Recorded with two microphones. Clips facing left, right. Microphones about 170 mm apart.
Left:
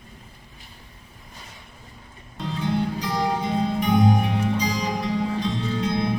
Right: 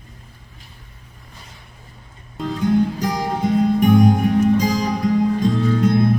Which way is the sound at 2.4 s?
45° right (ahead or behind).